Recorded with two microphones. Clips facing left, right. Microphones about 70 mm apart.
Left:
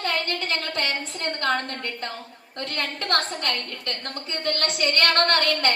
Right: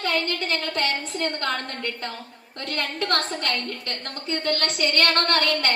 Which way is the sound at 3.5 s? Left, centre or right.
Right.